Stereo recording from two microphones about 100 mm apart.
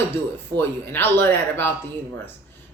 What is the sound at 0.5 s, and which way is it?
Speech, 20° left (ahead or behind).